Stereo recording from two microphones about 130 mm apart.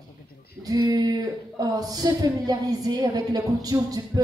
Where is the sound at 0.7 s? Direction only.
30° right (ahead or behind).